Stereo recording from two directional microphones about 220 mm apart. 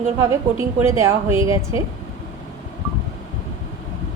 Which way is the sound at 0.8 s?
15° right (ahead or behind).